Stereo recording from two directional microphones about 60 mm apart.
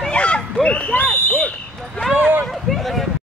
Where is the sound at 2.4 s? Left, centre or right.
Centre.